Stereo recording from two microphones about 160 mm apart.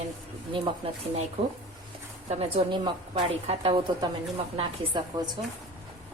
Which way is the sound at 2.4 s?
35° right (ahead or behind).